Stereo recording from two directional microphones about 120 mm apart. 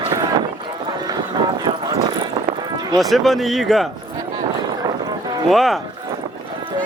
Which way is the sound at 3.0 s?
Centre (ahead or behind).